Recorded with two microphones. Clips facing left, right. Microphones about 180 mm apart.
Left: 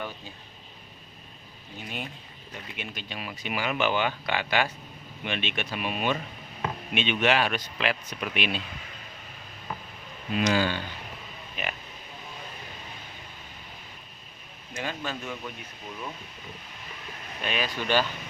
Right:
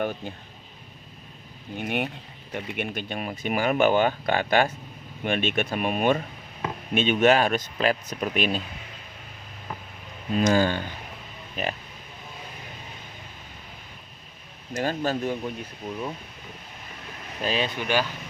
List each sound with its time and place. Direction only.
0.0 s speech: 50° right (ahead or behind)
1.8 s speech: 65° right (ahead or behind); by 8.6 s 40° right (ahead or behind)
10.3 s speech: 45° right (ahead or behind)
14.7 s speech: 40° right (ahead or behind)
17.4 s speech: 30° right (ahead or behind)
17.7 s speech: 10° right (ahead or behind)